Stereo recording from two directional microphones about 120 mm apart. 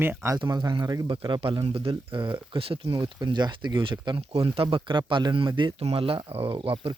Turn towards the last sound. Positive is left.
turn(degrees=-50)  # may be behind; listen again after turning